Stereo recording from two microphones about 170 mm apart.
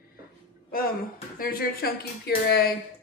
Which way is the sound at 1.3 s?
60° left (ahead or behind).